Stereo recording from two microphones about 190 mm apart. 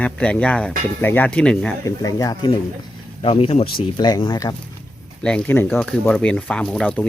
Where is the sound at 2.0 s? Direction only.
20° left (ahead or behind).